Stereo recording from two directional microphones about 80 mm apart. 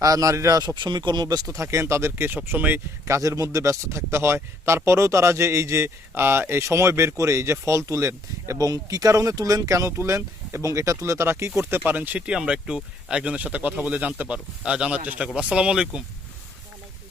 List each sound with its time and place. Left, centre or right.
0.0 s speech: right
0.8 s speech: right
1.5 s a man's voice: right
3.1 s a man's voice: right
8.5 s a man's voice: right
11.9 s speech: right